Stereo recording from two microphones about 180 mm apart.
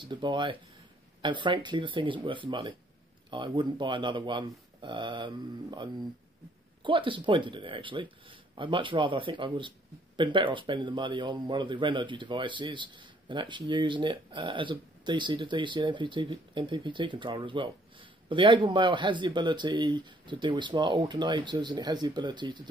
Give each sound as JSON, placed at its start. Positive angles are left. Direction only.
{"t": 0.0, "sound": "speech", "side_deg": -25}